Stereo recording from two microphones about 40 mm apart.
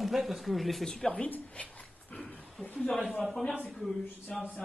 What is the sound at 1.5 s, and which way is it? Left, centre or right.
Dog, left.